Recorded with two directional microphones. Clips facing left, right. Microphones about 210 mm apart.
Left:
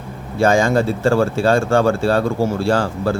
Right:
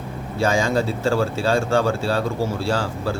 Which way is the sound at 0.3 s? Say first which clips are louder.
Left 5 dB; 55° left (ahead or behind).